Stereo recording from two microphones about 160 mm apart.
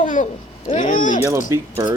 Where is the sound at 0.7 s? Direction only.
55° left (ahead or behind).